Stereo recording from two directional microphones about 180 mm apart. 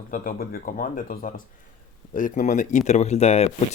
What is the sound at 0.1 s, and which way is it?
Speech, 50° left (ahead or behind).